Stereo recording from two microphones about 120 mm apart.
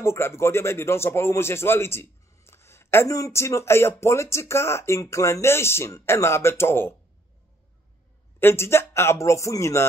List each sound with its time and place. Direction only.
0.0 s speech: 20° left (ahead or behind)
8.4 s speech: 20° left (ahead or behind)